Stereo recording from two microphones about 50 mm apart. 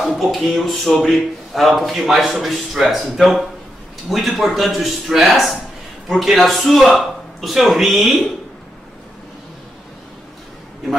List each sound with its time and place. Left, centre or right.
0.2 s a man's voice: centre